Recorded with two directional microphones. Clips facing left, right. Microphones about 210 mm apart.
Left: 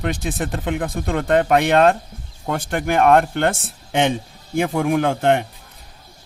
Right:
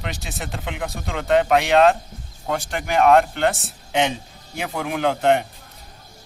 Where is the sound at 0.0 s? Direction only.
50° left (ahead or behind).